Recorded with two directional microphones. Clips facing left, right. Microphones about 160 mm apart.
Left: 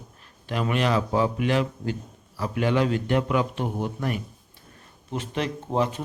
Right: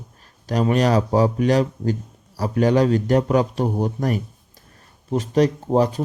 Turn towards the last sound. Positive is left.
turn(degrees=-40)  # may be behind; listen again after turning